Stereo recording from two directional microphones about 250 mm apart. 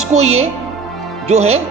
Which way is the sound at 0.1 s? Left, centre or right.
Right.